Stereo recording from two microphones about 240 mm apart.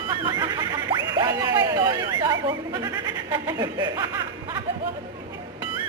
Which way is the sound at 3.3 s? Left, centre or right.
Centre.